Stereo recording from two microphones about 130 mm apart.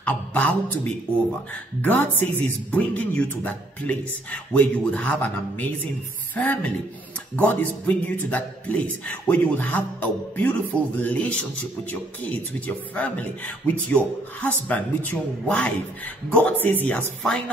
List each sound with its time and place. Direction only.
0.0 s a man's voice: 10° left (ahead or behind)